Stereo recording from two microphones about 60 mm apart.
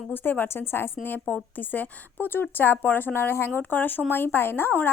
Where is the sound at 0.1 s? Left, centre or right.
Left.